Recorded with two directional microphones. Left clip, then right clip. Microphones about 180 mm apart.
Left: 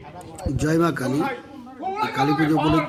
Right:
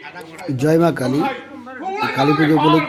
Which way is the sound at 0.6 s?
10° right (ahead or behind).